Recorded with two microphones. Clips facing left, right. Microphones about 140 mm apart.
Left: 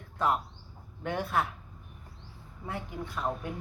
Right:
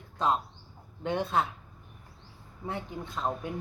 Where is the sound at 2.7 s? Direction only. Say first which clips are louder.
Right 1 dB; 25° right (ahead or behind).